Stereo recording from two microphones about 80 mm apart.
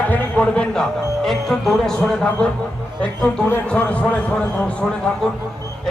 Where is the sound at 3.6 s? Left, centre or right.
Centre.